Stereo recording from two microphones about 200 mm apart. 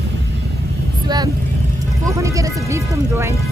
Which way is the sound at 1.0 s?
20° right (ahead or behind).